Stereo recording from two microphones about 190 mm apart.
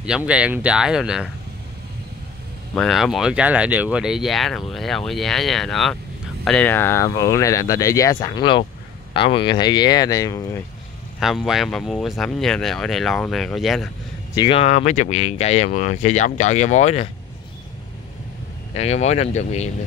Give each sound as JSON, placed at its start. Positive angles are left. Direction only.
{"t": 0.0, "sound": "speech", "side_deg": -5}
{"t": 2.7, "sound": "speech", "side_deg": 0}
{"t": 11.1, "sound": "speech", "side_deg": 0}
{"t": 14.3, "sound": "speech", "side_deg": 25}
{"t": 18.7, "sound": "speech", "side_deg": 35}